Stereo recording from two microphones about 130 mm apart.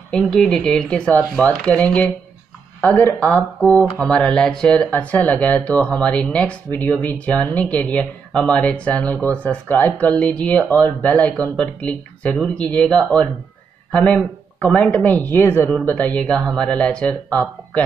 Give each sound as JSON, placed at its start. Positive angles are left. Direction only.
{"t": 0.1, "sound": "speech", "side_deg": 5}